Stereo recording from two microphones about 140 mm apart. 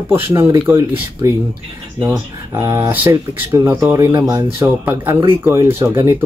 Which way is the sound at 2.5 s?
20° right (ahead or behind).